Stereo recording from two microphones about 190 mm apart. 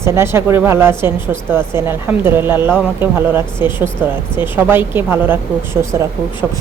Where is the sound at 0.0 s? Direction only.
15° right (ahead or behind).